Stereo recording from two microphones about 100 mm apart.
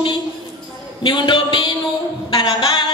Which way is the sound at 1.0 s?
55° left (ahead or behind).